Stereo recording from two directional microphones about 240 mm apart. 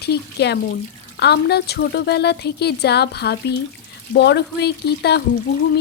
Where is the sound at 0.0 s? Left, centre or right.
Left.